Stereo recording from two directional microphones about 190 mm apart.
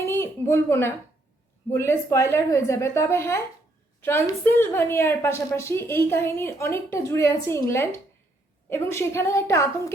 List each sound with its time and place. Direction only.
0.0 s a woman's voice: 15° left (ahead or behind)